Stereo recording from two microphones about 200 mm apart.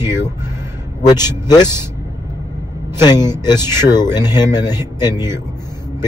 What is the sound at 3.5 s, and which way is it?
Speech, 15° right (ahead or behind).